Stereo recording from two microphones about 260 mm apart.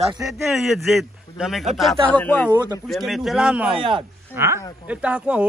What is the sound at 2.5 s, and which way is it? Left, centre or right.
Speech, centre.